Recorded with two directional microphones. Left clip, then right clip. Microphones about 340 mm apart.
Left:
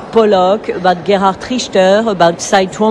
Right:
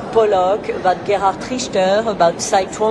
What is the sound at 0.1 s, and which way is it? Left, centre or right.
Speech, left.